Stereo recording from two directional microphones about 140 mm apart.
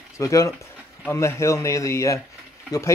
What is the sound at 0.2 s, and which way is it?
Speech, 25° left (ahead or behind).